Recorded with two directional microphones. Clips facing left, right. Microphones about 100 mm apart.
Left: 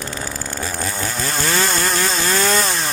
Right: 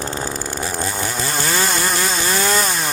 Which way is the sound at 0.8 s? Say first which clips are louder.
Even; 15° right (ahead or behind).